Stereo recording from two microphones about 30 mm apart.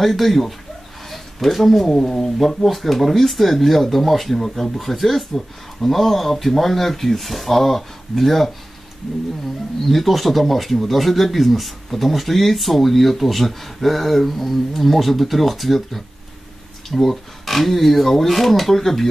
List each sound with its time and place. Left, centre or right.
0.0 s speech: centre
2.0 s speech: centre
2.3 s speech: centre
9.8 s speech: centre